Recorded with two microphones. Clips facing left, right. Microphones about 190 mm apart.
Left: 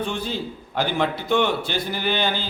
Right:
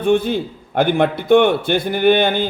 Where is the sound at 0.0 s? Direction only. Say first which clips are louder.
Right 11 dB; 55° right (ahead or behind).